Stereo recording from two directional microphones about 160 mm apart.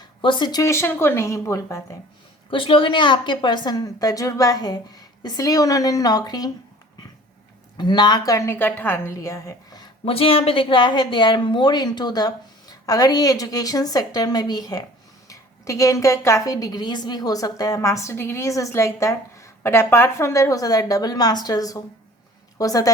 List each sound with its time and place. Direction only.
0.0 s a woman's voice: 30° left (ahead or behind)
2.5 s a woman's voice: 35° left (ahead or behind)
7.8 s a woman's voice: 30° left (ahead or behind)
10.1 s a woman's voice: 35° left (ahead or behind)